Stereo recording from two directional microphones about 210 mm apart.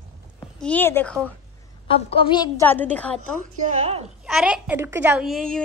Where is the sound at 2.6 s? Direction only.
10° left (ahead or behind).